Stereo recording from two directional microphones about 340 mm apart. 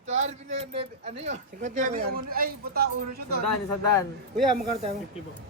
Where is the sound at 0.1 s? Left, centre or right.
Centre.